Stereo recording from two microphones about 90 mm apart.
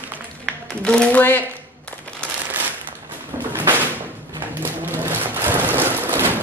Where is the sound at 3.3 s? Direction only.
25° right (ahead or behind).